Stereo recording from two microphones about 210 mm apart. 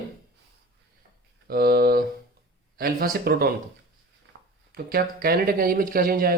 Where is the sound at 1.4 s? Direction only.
45° right (ahead or behind).